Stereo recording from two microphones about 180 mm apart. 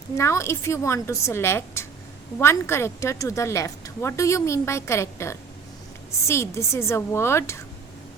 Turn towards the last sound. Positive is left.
turn(degrees=15)  # may be behind; listen again after turning